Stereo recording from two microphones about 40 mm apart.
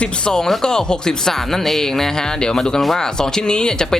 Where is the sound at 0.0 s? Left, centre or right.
Centre.